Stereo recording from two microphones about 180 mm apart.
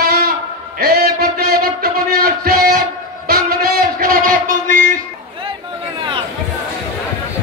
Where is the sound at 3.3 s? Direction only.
60° right (ahead or behind).